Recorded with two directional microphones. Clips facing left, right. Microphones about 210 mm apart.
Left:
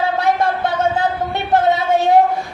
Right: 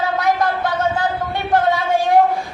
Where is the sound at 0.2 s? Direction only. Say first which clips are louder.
Left 1 dB; 30° left (ahead or behind).